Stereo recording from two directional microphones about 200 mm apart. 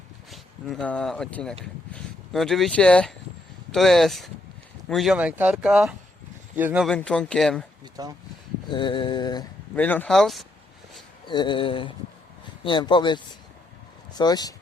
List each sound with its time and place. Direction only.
0.3 s a man's voice: 5° left (ahead or behind)
6.8 s speech: 5° left (ahead or behind)
8.0 s speech: 20° right (ahead or behind)
8.7 s a sound: 25° left (ahead or behind)
9.7 s speech: 10° left (ahead or behind)
11.3 s a sound: 25° left (ahead or behind)
14.1 s speech: 20° left (ahead or behind)